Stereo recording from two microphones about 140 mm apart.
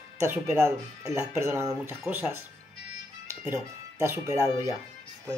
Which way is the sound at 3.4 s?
15° right (ahead or behind).